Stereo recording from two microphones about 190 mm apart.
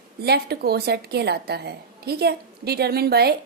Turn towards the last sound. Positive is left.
turn(degrees=-55)  # may be behind; listen again after turning